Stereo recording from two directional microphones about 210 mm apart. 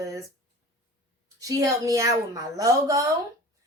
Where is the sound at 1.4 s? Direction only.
15° right (ahead or behind).